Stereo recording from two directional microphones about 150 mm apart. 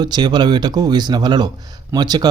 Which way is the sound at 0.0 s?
30° right (ahead or behind).